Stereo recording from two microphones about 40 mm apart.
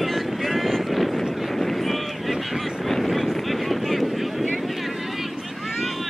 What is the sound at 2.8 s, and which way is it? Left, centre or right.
Vehicle, centre.